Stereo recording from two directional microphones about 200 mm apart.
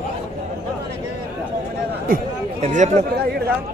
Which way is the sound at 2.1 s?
35° right (ahead or behind).